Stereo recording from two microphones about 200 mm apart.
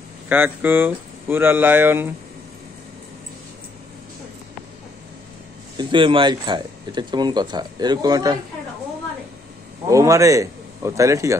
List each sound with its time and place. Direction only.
0.3 s speech: 10° right (ahead or behind)
5.8 s speech: 25° right (ahead or behind)
9.8 s speech: 15° right (ahead or behind)